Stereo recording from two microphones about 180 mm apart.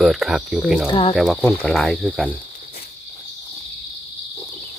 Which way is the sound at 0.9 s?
30° left (ahead or behind).